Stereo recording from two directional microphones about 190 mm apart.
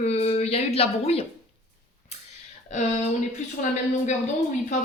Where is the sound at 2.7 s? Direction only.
40° left (ahead or behind).